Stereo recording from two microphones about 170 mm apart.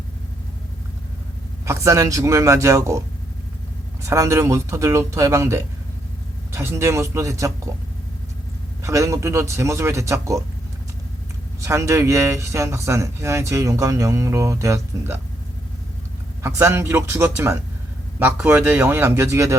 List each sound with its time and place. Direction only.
1.6 s speech: 15° right (ahead or behind)
4.0 s speech: 20° right (ahead or behind)
8.8 s speech: 20° right (ahead or behind)
11.6 s speech: 15° right (ahead or behind)
16.4 s speech: 15° right (ahead or behind)